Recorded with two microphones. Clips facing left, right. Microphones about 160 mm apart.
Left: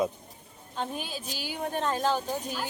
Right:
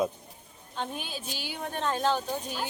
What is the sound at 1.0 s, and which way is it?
Speech, 40° left (ahead or behind).